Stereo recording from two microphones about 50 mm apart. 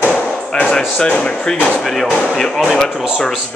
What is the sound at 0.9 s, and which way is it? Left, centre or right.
A man's voice, centre.